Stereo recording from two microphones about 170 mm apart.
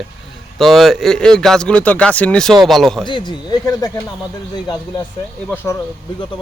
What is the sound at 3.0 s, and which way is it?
Speech, 25° left (ahead or behind).